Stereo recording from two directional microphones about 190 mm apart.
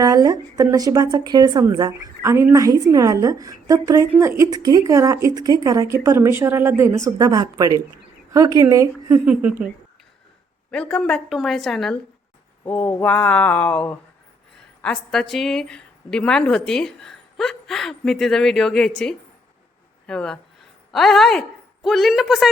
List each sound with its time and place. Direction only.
0.0 s a woman's voice: 20° right (ahead or behind)
10.7 s a woman's voice: 5° left (ahead or behind)
12.6 s a sound: 10° left (ahead or behind)
14.8 s a woman's voice: 5° left (ahead or behind)